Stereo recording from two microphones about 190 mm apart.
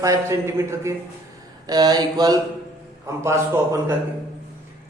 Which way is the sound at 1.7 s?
20° right (ahead or behind).